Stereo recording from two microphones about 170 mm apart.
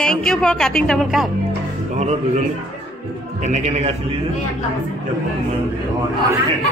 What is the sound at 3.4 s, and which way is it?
Speech, 45° right (ahead or behind).